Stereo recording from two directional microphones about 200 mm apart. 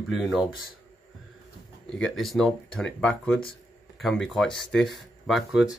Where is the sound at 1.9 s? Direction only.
5° left (ahead or behind).